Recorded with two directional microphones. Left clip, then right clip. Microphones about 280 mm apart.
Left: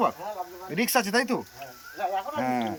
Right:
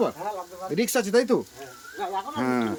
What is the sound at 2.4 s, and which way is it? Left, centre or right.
Speech, centre.